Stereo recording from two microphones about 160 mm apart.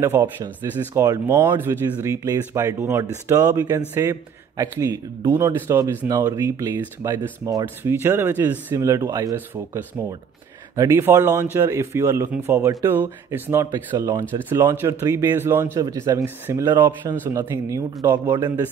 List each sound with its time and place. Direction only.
0.0 s a man's voice: 15° right (ahead or behind)